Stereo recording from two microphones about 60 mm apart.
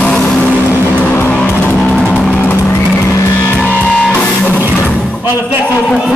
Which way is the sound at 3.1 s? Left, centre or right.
Left.